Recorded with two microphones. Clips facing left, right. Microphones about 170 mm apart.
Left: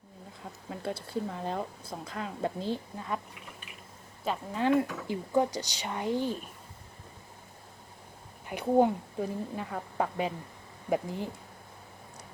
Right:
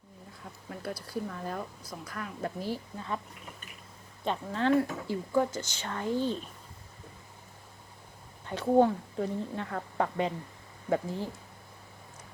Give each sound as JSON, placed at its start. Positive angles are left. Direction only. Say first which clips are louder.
{"t": 0.7, "sound": "speech", "louder": "left 2 dB", "side_deg": 25}
{"t": 4.2, "sound": "speech", "louder": "even", "side_deg": 10}
{"t": 8.4, "sound": "speech", "louder": "right 1 dB", "side_deg": 15}